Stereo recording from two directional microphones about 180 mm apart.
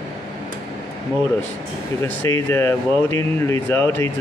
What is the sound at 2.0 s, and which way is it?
Speech, 10° left (ahead or behind).